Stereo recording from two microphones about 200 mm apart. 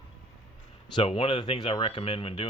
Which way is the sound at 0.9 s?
25° left (ahead or behind).